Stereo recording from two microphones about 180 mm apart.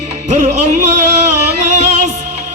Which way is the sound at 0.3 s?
40° right (ahead or behind).